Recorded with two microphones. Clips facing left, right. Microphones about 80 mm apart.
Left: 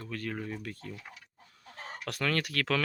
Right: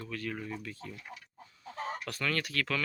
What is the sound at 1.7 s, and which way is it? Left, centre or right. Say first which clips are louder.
Speech: right 3 dB; left.